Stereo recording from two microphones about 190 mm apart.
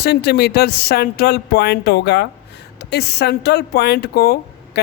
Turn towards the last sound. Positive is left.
turn(degrees=60)  # may be behind; listen again after turning